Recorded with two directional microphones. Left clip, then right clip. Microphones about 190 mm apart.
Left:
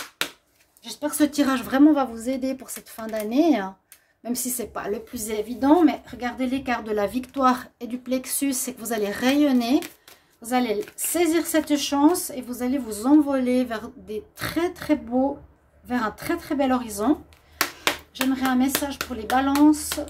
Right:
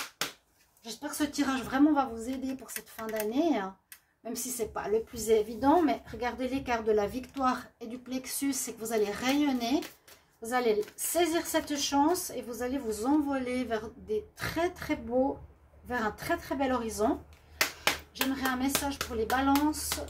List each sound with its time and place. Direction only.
1.0 s a woman's voice: 55° left (ahead or behind)
18.1 s a woman's voice: 45° left (ahead or behind)